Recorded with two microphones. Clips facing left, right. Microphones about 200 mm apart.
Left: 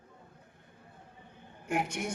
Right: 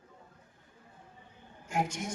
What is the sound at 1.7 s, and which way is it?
Speech, 60° left (ahead or behind).